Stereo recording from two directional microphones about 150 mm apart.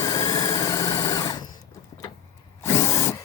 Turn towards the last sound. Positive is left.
turn(degrees=20)  # may be behind; listen again after turning